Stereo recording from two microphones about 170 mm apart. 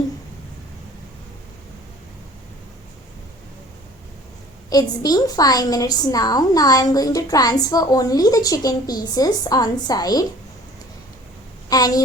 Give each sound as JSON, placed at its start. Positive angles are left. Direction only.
{"t": 4.7, "sound": "a woman's voice", "side_deg": 25}
{"t": 11.7, "sound": "a woman's voice", "side_deg": 20}